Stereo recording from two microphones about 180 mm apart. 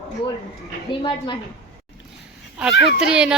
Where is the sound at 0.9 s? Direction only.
25° left (ahead or behind).